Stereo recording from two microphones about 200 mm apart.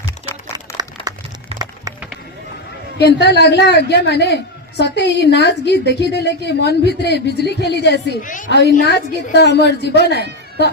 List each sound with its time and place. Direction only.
0.5 s music: 20° right (ahead or behind)
3.0 s a woman's voice: 55° left (ahead or behind)
8.2 s a woman's voice: 40° left (ahead or behind)
8.4 s a woman's voice: 55° left (ahead or behind)